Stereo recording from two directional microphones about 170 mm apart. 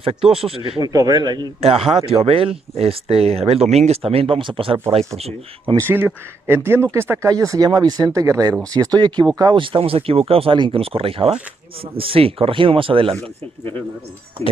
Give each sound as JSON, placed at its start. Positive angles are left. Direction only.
{"t": 0.0, "sound": "speech", "side_deg": -35}
{"t": 1.6, "sound": "speech", "side_deg": -35}
{"t": 5.9, "sound": "speech", "side_deg": -15}